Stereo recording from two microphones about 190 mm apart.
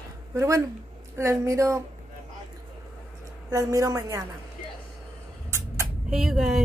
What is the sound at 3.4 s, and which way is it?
Speech, 15° right (ahead or behind).